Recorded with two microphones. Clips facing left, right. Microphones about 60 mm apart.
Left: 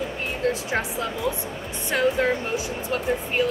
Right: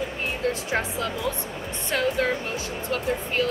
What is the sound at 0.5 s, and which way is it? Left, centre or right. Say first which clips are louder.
Speech: left 2 dB; centre.